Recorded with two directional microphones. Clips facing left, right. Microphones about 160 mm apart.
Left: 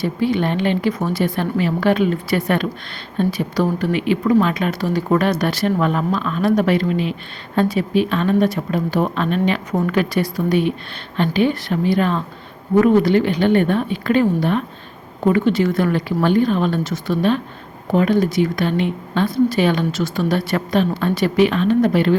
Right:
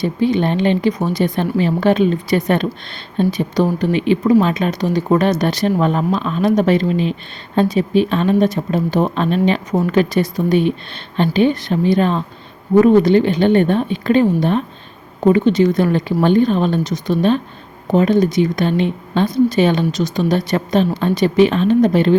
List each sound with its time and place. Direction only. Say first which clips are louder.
0.0 s a woman's voice: right 3 dB; 20° right (ahead or behind)